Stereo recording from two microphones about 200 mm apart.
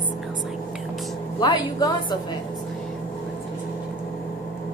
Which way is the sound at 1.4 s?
20° left (ahead or behind).